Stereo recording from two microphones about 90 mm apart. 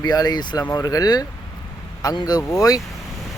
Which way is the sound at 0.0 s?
50° left (ahead or behind).